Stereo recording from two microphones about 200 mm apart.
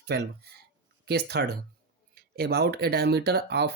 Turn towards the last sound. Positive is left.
turn(degrees=-55)  # may be behind; listen again after turning